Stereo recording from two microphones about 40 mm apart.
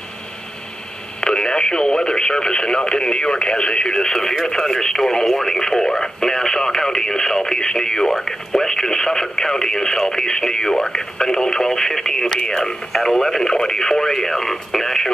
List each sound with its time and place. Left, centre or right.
1.2 s speech: left
12.9 s speech: centre
13.4 s speech: centre